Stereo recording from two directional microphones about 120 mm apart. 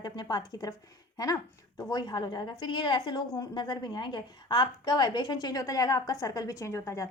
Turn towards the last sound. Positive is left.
turn(degrees=25)  # may be behind; listen again after turning